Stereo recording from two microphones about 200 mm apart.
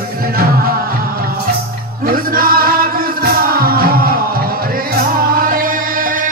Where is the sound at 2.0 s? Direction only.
45° right (ahead or behind).